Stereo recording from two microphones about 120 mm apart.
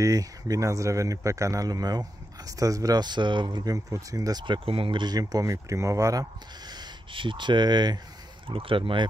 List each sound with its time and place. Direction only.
0.0 s speech: 30° right (ahead or behind)
3.7 s speech: 30° right (ahead or behind)
4.6 s speech: 50° right (ahead or behind); by 6.2 s 25° right (ahead or behind)
6.7 s speech: 40° right (ahead or behind)
8.5 s speech: 50° right (ahead or behind)